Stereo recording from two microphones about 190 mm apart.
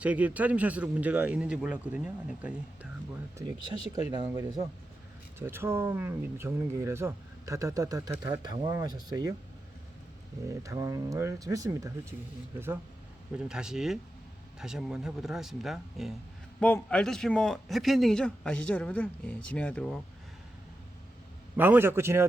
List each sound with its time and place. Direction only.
0.0 s speech: 10° right (ahead or behind)
5.4 s speech: 10° right (ahead or behind)
10.5 s a man's voice: 15° right (ahead or behind); by 20.0 s 5° left (ahead or behind)
21.5 s speech: 10° right (ahead or behind)